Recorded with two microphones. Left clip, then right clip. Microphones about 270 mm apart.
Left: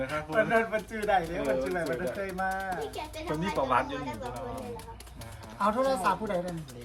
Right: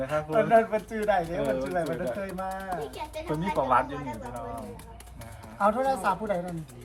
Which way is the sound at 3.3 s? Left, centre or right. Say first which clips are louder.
Right 3 dB; centre.